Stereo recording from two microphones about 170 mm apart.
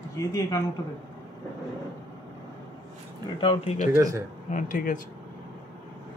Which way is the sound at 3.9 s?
15° right (ahead or behind).